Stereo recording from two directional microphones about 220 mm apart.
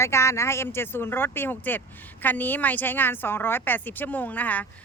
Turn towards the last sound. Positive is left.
turn(degrees=5)  # may be behind; listen again after turning